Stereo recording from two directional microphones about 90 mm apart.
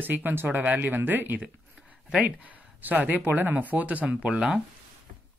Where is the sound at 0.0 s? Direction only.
20° right (ahead or behind).